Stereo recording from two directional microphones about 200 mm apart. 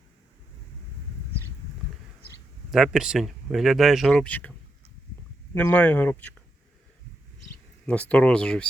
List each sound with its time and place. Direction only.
2.6 s speech: centre (ahead or behind)
5.5 s speech: 5° left (ahead or behind)
7.9 s speech: 5° left (ahead or behind)